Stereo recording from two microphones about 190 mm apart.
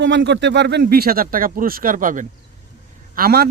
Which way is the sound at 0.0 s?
70° right (ahead or behind).